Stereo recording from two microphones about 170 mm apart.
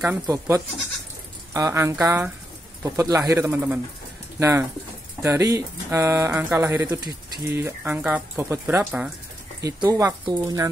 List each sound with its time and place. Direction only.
0.0 s speech: 15° right (ahead or behind)
9.6 s speech: 20° right (ahead or behind)